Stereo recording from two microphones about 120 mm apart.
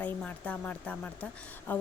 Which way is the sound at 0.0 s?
10° left (ahead or behind).